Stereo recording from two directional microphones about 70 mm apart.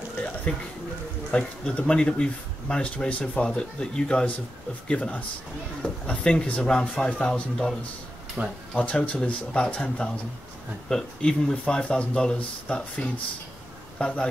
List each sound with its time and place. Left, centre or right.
0.5 s speech: centre
8.4 s speech: right
8.7 s a man's voice: centre